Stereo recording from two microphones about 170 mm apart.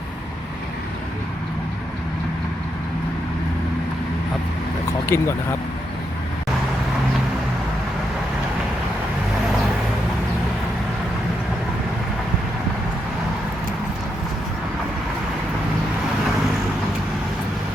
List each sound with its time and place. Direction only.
5.0 s speech: 15° left (ahead or behind)